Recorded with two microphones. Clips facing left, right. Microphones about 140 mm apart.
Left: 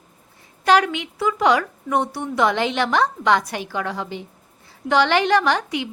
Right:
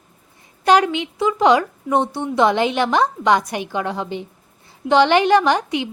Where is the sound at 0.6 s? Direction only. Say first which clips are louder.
Right 2 dB; 20° right (ahead or behind).